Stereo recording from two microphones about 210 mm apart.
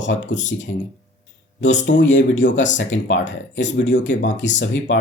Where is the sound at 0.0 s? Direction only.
60° left (ahead or behind).